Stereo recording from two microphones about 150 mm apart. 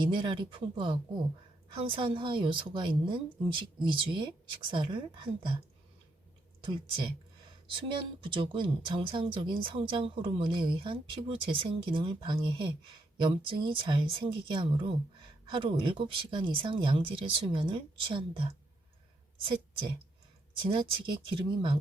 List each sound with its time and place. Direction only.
0.0 s speech: 35° right (ahead or behind)
8.2 s speech: 35° right (ahead or behind)
20.6 s speech: 35° right (ahead or behind)